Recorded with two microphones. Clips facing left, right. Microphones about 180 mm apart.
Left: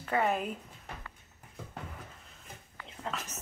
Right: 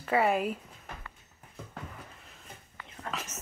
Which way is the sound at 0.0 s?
5° right (ahead or behind).